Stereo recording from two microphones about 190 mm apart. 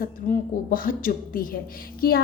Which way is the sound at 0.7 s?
45° left (ahead or behind).